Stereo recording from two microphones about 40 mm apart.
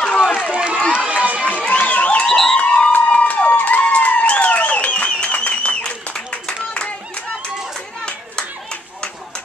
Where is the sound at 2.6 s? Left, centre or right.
Left.